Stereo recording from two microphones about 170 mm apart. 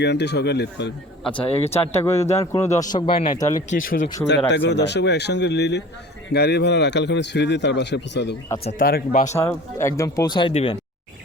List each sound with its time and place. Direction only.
0.0 s speech: 85° left
1.3 s speech: 30° left (ahead or behind)
2.0 s a man's voice: 15° left (ahead or behind)
3.7 s speech: 50° left (ahead or behind)
4.4 s speech: 90° left
8.8 s speech: 60° left (ahead or behind)
9.3 s speech: 15° left (ahead or behind); by 10.8 s 35° left (ahead or behind)